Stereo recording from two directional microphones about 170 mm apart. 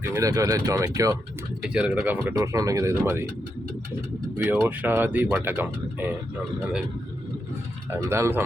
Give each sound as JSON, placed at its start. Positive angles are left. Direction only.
{"t": 0.0, "sound": "speech", "side_deg": -15}
{"t": 1.7, "sound": "speech", "side_deg": -5}
{"t": 2.3, "sound": "speech", "side_deg": -20}
{"t": 4.4, "sound": "speech", "side_deg": -10}
{"t": 7.9, "sound": "speech", "side_deg": -15}